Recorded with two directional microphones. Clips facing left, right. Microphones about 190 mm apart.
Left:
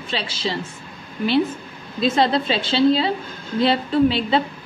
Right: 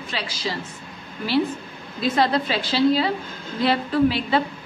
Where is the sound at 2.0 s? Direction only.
25° left (ahead or behind).